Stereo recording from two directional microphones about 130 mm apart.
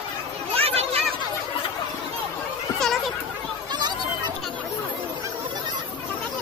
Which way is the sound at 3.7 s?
35° right (ahead or behind).